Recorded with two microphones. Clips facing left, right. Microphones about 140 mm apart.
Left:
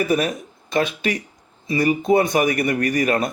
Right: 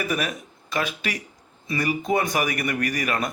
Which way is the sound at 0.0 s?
35° left (ahead or behind).